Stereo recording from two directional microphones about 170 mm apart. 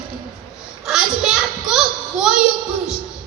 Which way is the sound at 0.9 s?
5° right (ahead or behind).